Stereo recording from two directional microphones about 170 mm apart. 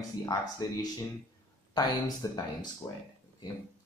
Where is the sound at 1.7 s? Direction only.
25° left (ahead or behind).